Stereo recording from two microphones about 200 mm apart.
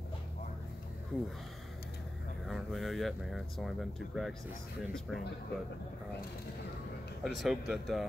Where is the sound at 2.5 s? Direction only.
Centre (ahead or behind).